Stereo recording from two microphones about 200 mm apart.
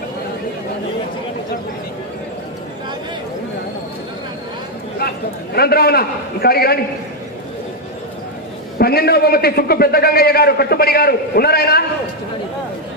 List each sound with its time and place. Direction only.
5.5 s a man's voice: 50° left (ahead or behind)
8.8 s a man's voice: 50° left (ahead or behind)